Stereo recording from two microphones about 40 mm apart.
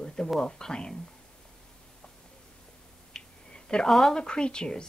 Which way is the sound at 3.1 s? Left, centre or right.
Centre.